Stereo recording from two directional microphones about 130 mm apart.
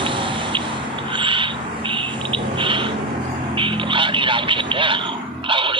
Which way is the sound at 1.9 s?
40° right (ahead or behind).